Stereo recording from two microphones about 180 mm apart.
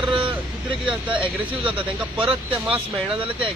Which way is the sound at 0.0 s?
25° right (ahead or behind).